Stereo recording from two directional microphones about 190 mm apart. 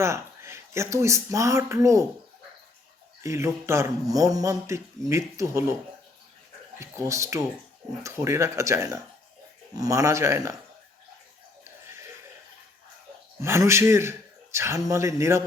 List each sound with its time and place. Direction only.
0.0 s speech: 15° right (ahead or behind)
3.2 s speech: 15° right (ahead or behind)
6.7 s speech: 15° right (ahead or behind)
11.6 s chuckle: 15° right (ahead or behind)
13.4 s speech: 15° right (ahead or behind)